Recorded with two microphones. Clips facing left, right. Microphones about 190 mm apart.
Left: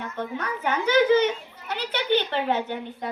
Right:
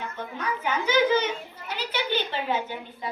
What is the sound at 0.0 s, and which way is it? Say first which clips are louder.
A woman's voice: left 2 dB; 60° left (ahead or behind).